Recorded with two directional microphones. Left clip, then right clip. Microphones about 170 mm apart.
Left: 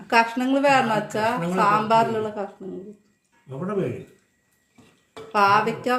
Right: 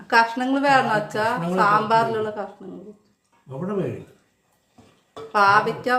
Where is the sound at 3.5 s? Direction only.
15° right (ahead or behind).